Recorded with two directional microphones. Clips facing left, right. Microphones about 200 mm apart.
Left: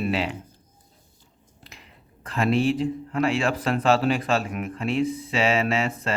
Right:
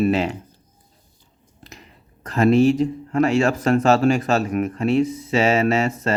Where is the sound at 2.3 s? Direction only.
45° right (ahead or behind).